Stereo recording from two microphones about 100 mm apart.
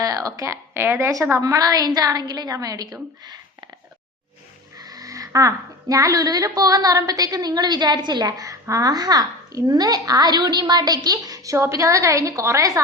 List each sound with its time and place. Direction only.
0.0 s speech: 35° right (ahead or behind); by 1.1 s 20° right (ahead or behind)
1.2 s speech: 35° right (ahead or behind)
4.8 s speech: 40° right (ahead or behind)